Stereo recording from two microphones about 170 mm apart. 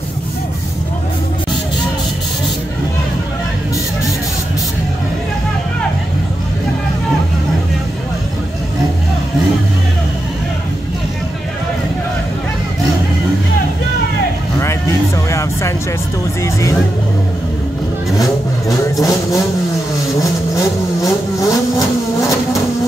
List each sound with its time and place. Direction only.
18.1 s vehicle: 20° left (ahead or behind)